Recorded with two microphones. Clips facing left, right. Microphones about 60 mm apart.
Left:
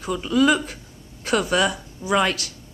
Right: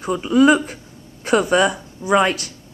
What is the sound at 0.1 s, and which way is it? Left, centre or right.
Speech, right.